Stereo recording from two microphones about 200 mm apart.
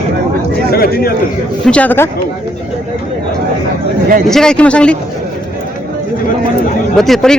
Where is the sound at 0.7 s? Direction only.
50° left (ahead or behind).